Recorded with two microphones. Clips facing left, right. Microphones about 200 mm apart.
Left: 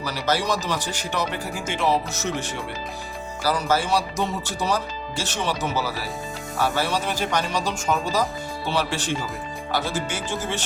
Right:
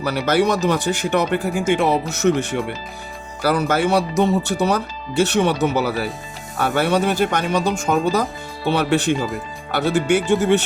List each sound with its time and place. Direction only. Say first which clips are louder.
0.0 s speech: right 7 dB; 60° right (ahead or behind)